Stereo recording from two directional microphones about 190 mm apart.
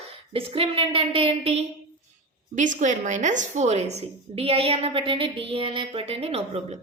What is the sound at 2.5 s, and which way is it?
A woman's voice, 40° right (ahead or behind).